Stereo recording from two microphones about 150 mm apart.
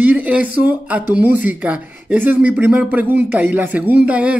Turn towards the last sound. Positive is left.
turn(degrees=-10)  # may be behind; listen again after turning